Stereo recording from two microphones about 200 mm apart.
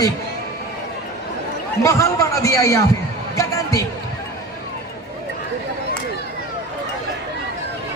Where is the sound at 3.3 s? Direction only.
15° left (ahead or behind).